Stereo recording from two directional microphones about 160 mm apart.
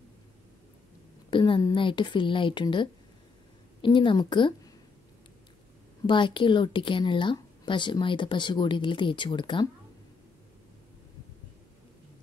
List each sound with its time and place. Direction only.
1.3 s a woman's voice: 30° left (ahead or behind)
6.0 s speech: 30° left (ahead or behind)